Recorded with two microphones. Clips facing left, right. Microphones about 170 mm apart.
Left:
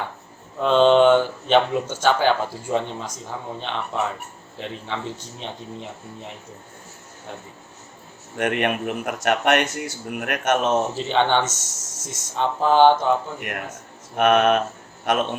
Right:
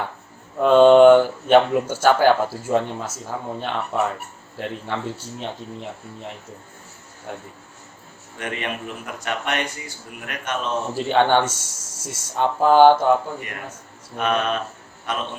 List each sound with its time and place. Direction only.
0.6 s speech: 10° right (ahead or behind)
8.4 s speech: 65° left (ahead or behind)
10.9 s speech: 10° right (ahead or behind)
14.2 s speech: 75° left (ahead or behind)